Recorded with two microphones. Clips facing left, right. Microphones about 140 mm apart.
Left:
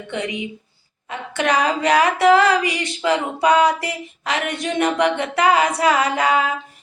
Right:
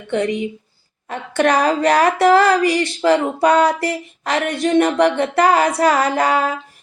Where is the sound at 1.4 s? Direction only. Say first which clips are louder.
Right 4 dB; 45° right (ahead or behind).